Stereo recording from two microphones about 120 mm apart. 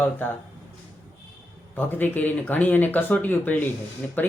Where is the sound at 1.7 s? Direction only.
15° left (ahead or behind).